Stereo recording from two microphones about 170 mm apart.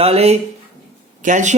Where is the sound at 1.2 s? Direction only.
45° right (ahead or behind).